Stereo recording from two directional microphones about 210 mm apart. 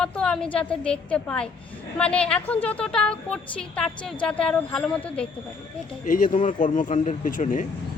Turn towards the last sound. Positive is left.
turn(degrees=40)  # may be behind; listen again after turning